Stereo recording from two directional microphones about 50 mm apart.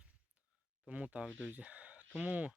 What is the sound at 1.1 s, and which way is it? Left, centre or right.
Speech, right.